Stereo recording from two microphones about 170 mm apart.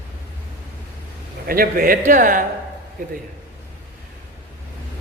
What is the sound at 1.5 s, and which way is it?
Speech, 60° right (ahead or behind).